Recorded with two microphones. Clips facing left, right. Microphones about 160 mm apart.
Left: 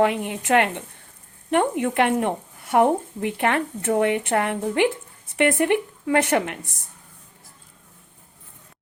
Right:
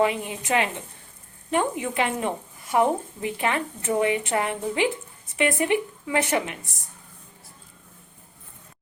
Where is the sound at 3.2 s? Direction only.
60° left (ahead or behind).